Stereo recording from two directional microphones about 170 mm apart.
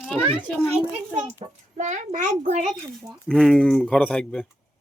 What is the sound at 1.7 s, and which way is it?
Speech, 45° right (ahead or behind).